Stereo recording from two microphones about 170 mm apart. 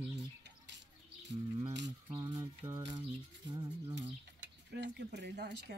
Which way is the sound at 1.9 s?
25° right (ahead or behind).